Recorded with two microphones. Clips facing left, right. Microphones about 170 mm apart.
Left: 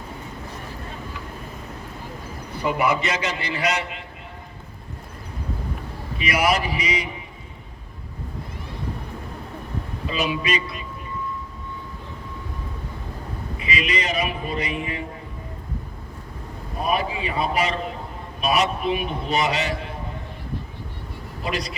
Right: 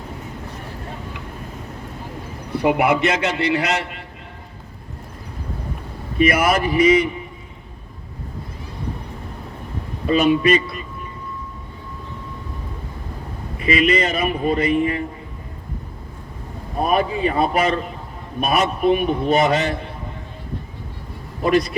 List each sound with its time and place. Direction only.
2.5 s a man's voice: 65° right (ahead or behind)
6.1 s a man's voice: 50° right (ahead or behind)
10.1 s a man's voice: 50° right (ahead or behind)
13.7 s a man's voice: 55° right (ahead or behind)
16.8 s a man's voice: 45° right (ahead or behind)
21.4 s a man's voice: 50° right (ahead or behind)